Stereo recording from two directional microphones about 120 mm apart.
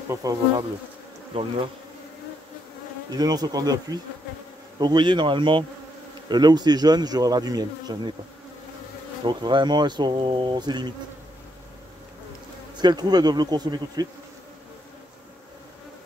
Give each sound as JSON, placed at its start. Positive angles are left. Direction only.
{"t": 0.1, "sound": "bee", "side_deg": -30}
{"t": 1.3, "sound": "bee", "side_deg": -50}
{"t": 3.1, "sound": "speech", "side_deg": -30}
{"t": 9.2, "sound": "speech", "side_deg": -40}
{"t": 12.7, "sound": "speech", "side_deg": -35}